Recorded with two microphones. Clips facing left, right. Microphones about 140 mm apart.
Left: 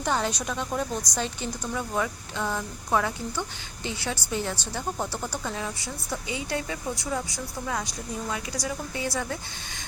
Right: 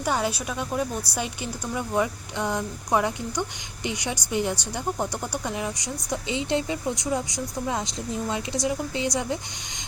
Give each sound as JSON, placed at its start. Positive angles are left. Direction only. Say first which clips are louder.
{"t": 0.0, "sound": "a woman's voice", "louder": "right 1 dB", "side_deg": -10}